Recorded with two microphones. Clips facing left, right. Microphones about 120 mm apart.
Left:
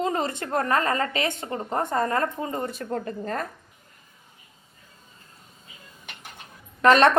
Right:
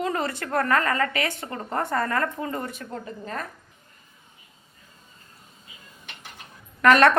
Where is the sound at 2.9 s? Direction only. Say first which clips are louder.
Left 5 dB; 50° left (ahead or behind).